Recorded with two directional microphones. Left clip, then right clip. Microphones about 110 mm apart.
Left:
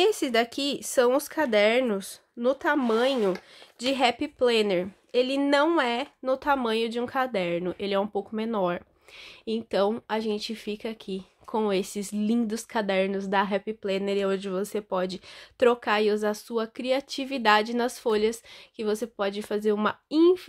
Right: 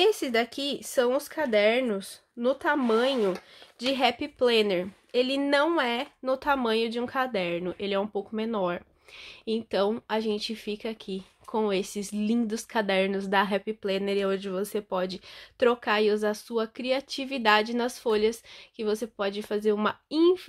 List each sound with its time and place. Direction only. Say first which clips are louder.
0.0 s speech: left 1 dB; 40° left (ahead or behind)
2.4 s a woman's voice: left 1 dB; 25° left (ahead or behind)